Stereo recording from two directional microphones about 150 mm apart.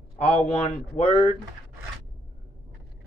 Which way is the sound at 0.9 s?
50° left (ahead or behind).